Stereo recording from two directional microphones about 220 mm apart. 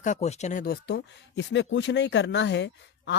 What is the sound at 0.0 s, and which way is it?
Speech, 30° left (ahead or behind).